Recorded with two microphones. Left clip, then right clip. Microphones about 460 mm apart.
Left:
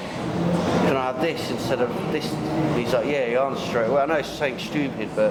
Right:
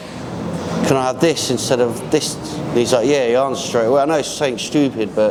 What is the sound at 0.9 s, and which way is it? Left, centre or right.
A man's voice, right.